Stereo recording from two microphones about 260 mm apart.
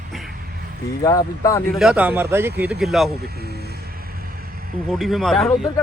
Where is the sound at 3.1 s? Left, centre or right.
Right.